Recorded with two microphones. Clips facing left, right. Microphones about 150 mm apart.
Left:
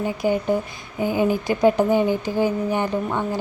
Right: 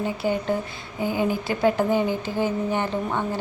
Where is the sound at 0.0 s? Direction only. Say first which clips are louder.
Left 3 dB; 15° left (ahead or behind).